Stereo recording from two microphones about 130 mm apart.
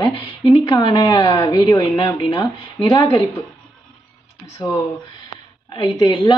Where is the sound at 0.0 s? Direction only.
40° left (ahead or behind).